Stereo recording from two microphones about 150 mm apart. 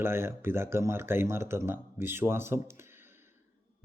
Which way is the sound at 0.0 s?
15° right (ahead or behind).